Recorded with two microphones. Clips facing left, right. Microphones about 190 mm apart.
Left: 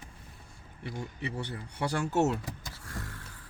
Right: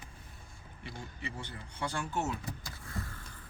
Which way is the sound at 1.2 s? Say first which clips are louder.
Left 6 dB; 70° left (ahead or behind).